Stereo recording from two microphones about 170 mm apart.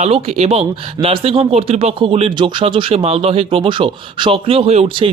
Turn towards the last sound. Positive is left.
turn(degrees=-35)  # may be behind; listen again after turning